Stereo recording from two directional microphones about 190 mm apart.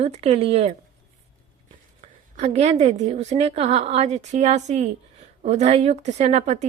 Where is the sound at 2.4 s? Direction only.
35° right (ahead or behind).